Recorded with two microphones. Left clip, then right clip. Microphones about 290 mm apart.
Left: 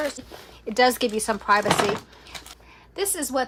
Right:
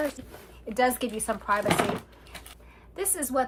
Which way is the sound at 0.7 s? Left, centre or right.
Left.